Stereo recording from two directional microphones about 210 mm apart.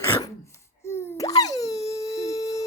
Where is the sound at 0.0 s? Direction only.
15° left (ahead or behind).